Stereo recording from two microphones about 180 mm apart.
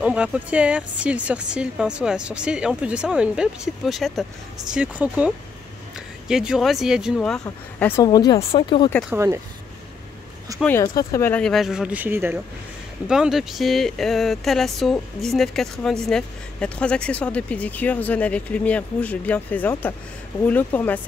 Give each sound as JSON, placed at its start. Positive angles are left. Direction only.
{"t": 0.0, "sound": "speech", "side_deg": -5}
{"t": 7.4, "sound": "a woman's voice", "side_deg": 15}
{"t": 9.1, "sound": "speech", "side_deg": -15}
{"t": 10.6, "sound": "speech", "side_deg": 15}